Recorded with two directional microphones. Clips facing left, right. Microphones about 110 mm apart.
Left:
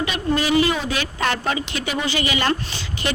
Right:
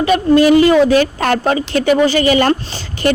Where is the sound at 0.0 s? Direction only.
45° right (ahead or behind).